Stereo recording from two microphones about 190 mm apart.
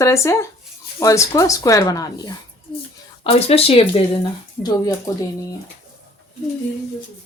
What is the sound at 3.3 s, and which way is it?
Speech, 30° left (ahead or behind).